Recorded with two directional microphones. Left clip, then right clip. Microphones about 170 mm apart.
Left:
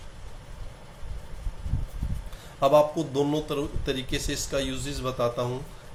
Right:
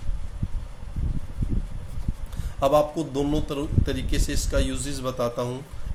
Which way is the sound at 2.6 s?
20° right (ahead or behind).